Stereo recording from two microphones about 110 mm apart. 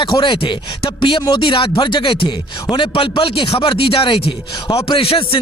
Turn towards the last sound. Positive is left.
turn(degrees=60)  # may be behind; listen again after turning